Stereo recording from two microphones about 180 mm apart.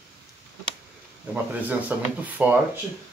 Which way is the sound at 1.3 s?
10° right (ahead or behind).